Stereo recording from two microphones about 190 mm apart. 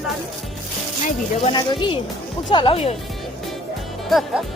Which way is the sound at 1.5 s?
25° left (ahead or behind).